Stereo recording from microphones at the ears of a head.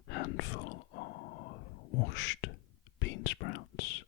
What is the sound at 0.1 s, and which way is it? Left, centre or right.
Whispering, left.